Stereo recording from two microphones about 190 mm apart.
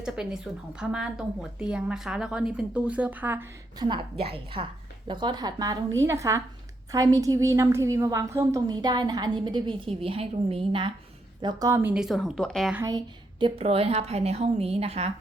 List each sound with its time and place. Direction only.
0.0 s speech: 5° right (ahead or behind)
3.8 s a woman's voice: 25° right (ahead or behind); by 12.7 s 5° left (ahead or behind)
12.7 s a woman's voice: 15° right (ahead or behind)
13.4 s a woman's voice: 30° right (ahead or behind)